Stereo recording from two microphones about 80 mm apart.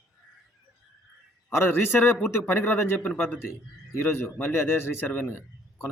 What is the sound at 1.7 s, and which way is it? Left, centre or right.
A man's voice, left.